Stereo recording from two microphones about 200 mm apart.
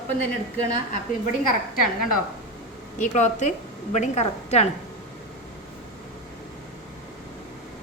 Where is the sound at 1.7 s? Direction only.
45° left (ahead or behind).